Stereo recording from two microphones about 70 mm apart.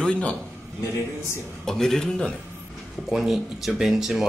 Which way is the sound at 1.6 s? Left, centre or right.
Centre.